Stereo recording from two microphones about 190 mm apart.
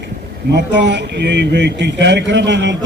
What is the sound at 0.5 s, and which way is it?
Speech, 65° right (ahead or behind).